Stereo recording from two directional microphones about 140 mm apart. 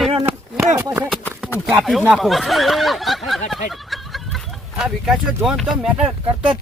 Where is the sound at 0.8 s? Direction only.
20° right (ahead or behind).